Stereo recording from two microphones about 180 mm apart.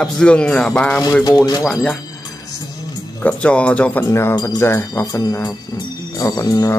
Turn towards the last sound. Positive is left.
turn(degrees=20)  # may be behind; listen again after turning